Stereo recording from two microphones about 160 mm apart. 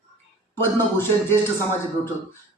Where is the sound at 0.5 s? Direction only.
15° left (ahead or behind).